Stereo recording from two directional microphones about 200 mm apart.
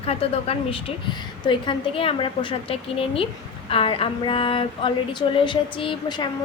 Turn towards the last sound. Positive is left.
turn(degrees=25)  # may be behind; listen again after turning